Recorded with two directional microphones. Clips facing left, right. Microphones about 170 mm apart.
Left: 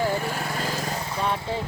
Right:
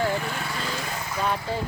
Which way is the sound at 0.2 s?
40° left (ahead or behind).